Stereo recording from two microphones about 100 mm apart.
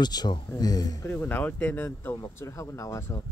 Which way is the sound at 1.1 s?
20° left (ahead or behind).